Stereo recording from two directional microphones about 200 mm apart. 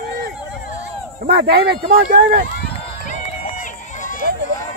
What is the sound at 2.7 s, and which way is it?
Run, 35° left (ahead or behind).